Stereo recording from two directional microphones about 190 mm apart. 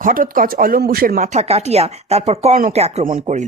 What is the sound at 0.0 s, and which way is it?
A woman's voice, 45° right (ahead or behind).